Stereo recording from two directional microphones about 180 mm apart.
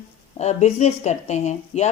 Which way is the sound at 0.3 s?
40° left (ahead or behind).